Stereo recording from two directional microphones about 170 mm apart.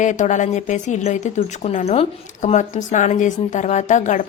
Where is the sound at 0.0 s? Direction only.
45° left (ahead or behind).